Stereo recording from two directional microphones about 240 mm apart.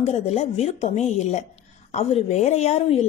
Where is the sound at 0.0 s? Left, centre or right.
Left.